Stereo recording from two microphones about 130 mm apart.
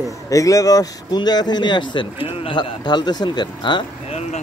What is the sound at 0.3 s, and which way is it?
Speech, 25° left (ahead or behind).